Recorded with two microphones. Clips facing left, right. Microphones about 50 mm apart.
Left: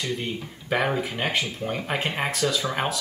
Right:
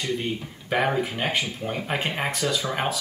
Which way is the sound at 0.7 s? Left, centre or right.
Centre.